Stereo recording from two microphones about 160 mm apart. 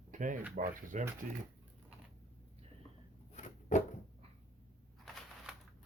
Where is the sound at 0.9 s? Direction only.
55° right (ahead or behind).